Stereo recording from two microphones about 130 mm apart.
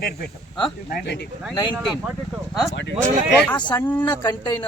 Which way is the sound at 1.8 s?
10° right (ahead or behind).